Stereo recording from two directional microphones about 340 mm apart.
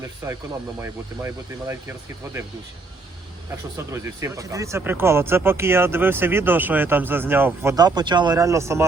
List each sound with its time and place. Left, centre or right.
0.2 s speech: centre
4.0 s speech: centre